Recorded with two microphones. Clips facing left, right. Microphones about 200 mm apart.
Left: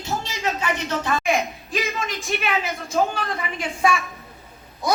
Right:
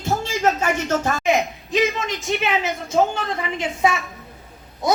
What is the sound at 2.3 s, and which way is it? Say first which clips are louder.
A woman's voice: right 3 dB; 25° right (ahead or behind).